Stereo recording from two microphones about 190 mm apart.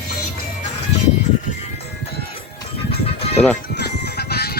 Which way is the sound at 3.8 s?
55° left (ahead or behind).